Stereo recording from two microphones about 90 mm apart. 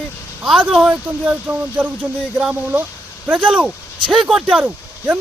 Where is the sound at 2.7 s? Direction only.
20° right (ahead or behind).